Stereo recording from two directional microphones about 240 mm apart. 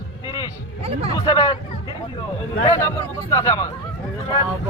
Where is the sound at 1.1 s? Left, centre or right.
Centre.